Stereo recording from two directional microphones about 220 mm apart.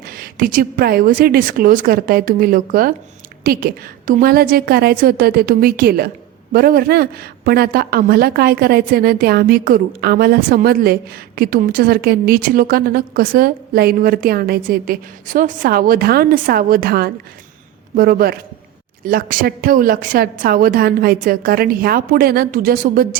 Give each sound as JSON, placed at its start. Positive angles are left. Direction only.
{"t": 0.1, "sound": "a woman's voice", "side_deg": -40}